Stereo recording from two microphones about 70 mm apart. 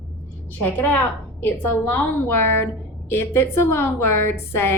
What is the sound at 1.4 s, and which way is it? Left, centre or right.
A woman's voice, left.